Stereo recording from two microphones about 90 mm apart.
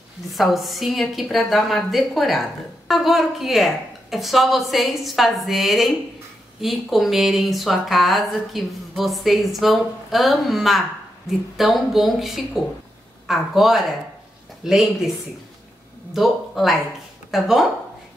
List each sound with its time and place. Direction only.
0.3 s speech: centre (ahead or behind)